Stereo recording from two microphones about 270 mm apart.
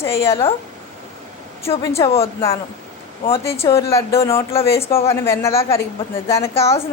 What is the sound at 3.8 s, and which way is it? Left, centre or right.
A woman's voice, centre.